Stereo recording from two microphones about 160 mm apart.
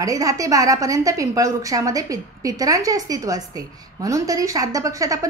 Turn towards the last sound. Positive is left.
turn(degrees=-20)  # may be behind; listen again after turning